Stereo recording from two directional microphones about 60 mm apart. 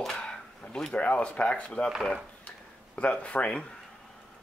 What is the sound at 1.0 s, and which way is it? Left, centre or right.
Speech, left.